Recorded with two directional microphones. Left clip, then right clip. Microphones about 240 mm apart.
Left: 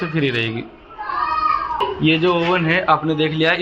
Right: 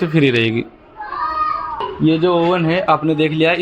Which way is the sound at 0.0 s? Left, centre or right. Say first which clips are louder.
Right 5 dB; right.